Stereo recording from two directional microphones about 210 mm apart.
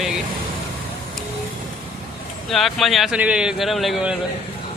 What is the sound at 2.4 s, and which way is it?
Speech, centre (ahead or behind).